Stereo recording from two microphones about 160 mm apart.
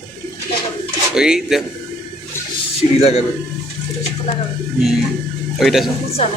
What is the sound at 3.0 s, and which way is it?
Speech, 40° left (ahead or behind).